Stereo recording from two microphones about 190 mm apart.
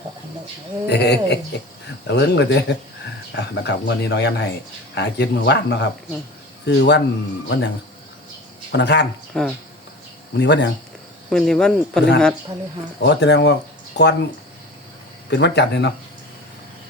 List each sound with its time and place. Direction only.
0.9 s speech: 60° left (ahead or behind)
8.7 s speech: 65° left (ahead or behind)
9.3 s speech: 5° left (ahead or behind)
10.3 s speech: 65° left (ahead or behind)
11.3 s speech: 5° left (ahead or behind)
13.0 s speech: 65° left (ahead or behind)
15.3 s speech: 65° left (ahead or behind)